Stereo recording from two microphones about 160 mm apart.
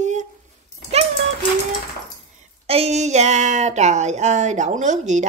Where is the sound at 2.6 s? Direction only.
40° right (ahead or behind).